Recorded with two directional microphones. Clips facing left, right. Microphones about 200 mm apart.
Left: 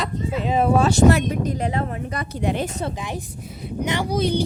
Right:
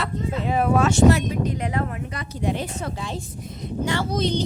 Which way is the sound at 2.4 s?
70° left (ahead or behind).